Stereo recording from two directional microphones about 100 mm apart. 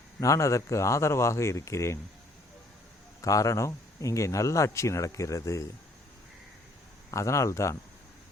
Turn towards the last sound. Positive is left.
turn(degrees=30)  # may be behind; listen again after turning